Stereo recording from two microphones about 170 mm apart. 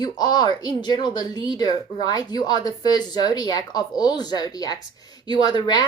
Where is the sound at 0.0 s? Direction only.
25° left (ahead or behind).